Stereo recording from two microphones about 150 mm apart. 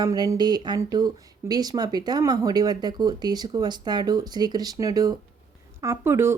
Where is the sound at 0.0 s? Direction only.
25° right (ahead or behind).